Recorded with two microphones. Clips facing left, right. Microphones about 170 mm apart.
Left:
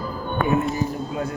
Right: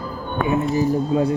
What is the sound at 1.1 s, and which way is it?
Speech, 30° right (ahead or behind).